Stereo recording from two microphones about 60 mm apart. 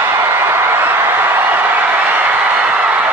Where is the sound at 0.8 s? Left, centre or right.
Right.